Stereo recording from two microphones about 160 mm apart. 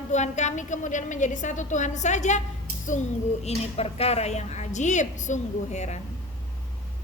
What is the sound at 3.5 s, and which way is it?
Speech, 40° left (ahead or behind).